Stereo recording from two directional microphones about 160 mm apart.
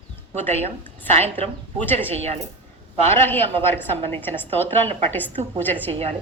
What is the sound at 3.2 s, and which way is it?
A woman's voice, 10° left (ahead or behind).